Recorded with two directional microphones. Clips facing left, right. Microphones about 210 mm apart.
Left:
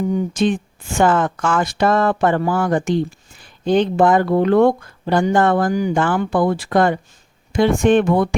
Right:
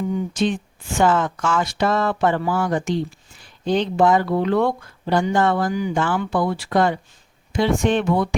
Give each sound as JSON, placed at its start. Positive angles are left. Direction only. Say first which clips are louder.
{"t": 0.1, "sound": "a woman's voice", "louder": "left 4 dB", "side_deg": 50}